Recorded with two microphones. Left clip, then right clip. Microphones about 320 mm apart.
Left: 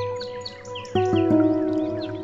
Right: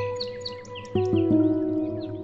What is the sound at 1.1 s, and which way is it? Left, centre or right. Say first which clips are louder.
Music: left 2 dB; left.